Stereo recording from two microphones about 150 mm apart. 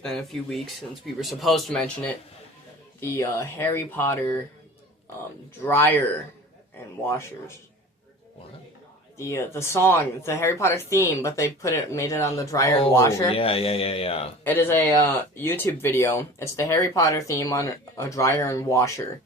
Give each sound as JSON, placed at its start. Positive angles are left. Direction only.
{"t": 0.0, "sound": "speech", "side_deg": 0}
{"t": 3.0, "sound": "speech", "side_deg": 20}
{"t": 5.6, "sound": "speech", "side_deg": 15}
{"t": 9.1, "sound": "speech", "side_deg": 20}
{"t": 13.3, "sound": "a man's voice", "side_deg": 40}
{"t": 14.4, "sound": "speech", "side_deg": 15}